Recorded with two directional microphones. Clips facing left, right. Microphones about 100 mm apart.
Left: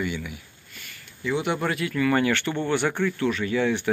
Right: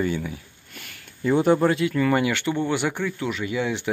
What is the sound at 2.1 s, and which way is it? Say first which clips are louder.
Speech: right 1 dB; 15° right (ahead or behind).